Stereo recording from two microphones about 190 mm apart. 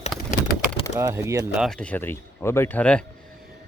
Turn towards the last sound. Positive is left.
turn(degrees=5)  # may be behind; listen again after turning